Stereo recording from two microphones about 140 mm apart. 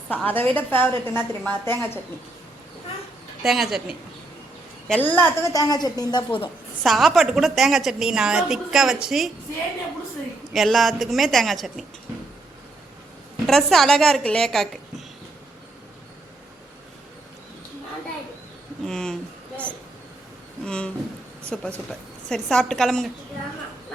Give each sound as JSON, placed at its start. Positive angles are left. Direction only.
{"t": 0.1, "sound": "a woman's voice", "side_deg": 10}
{"t": 3.4, "sound": "a woman's voice", "side_deg": 0}
{"t": 4.9, "sound": "a woman's voice", "side_deg": 15}
{"t": 5.4, "sound": "a woman's voice", "side_deg": 25}
{"t": 6.8, "sound": "a woman's voice", "side_deg": 0}
{"t": 10.5, "sound": "a woman's voice", "side_deg": 0}
{"t": 13.5, "sound": "a woman's voice", "side_deg": 0}
{"t": 18.9, "sound": "a woman's voice", "side_deg": 5}
{"t": 20.7, "sound": "a woman's voice", "side_deg": 5}